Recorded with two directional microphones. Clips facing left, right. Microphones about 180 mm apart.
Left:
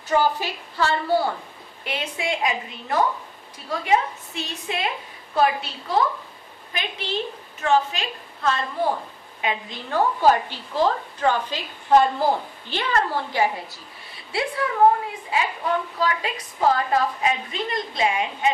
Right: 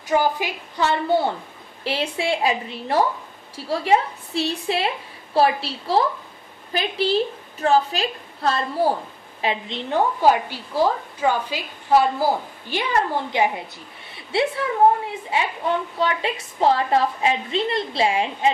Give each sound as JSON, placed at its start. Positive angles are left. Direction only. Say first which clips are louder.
{"t": 0.1, "sound": "a woman's voice", "louder": "right 1 dB", "side_deg": -15}
{"t": 16.0, "sound": "a woman's voice", "louder": "right 2 dB", "side_deg": -25}